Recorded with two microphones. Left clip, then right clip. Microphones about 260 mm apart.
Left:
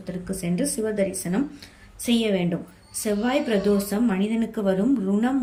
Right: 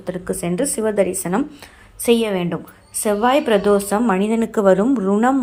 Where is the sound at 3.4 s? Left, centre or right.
Right.